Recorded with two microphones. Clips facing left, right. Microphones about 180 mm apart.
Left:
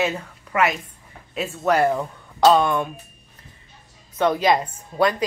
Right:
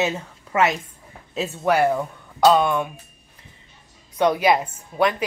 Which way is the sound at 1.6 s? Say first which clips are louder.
Even; 5° right (ahead or behind).